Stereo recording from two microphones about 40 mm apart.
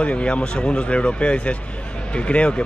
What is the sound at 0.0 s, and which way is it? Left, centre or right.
Speech, left.